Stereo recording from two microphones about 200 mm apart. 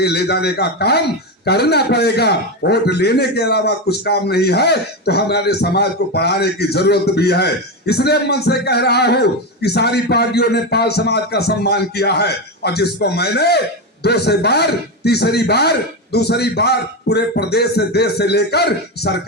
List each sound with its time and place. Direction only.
0.0 s a man's voice: 55° left (ahead or behind)